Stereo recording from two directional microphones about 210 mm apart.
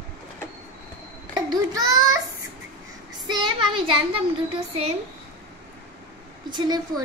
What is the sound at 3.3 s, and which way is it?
Child singing, 25° right (ahead or behind).